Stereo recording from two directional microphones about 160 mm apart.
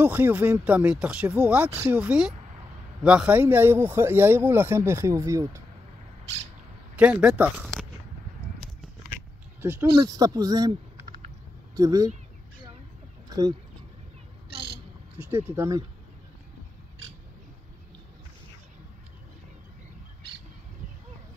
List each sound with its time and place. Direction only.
0.0 s speech: 10° right (ahead or behind)
1.7 s speech: 20° right (ahead or behind)
2.0 s a woman's voice: 5° right (ahead or behind)
7.0 s speech: 10° right (ahead or behind)
9.6 s speech: 15° right (ahead or behind)
13.3 s speech: 20° right (ahead or behind)
14.5 s a sound: 90° right
15.1 s speech: 10° right (ahead or behind)